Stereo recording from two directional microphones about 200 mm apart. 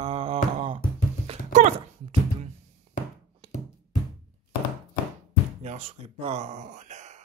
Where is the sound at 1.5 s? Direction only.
40° right (ahead or behind).